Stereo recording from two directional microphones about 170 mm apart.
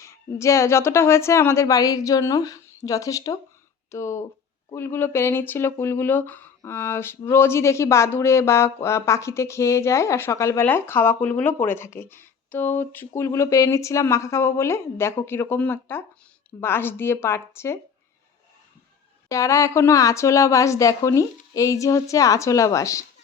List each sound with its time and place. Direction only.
0.0 s speech: 15° left (ahead or behind)
19.3 s a woman's voice: 20° left (ahead or behind)